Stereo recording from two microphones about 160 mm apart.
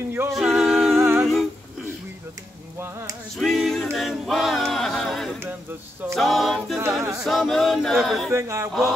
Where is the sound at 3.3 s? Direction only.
Centre (ahead or behind).